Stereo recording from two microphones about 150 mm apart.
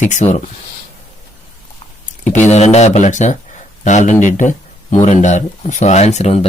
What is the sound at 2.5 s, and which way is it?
Speech, 45° left (ahead or behind).